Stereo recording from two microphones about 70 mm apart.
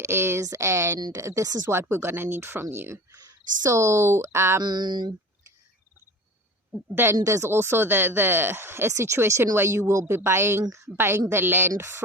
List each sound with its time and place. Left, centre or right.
0.0 s speech: right
4.6 s a sound: right
6.9 s speech: right